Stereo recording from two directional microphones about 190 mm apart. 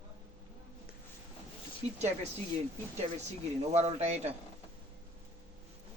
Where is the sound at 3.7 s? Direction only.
35° right (ahead or behind).